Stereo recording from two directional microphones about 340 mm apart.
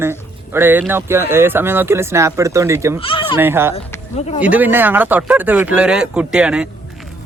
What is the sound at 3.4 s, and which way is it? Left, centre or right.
Speech, centre.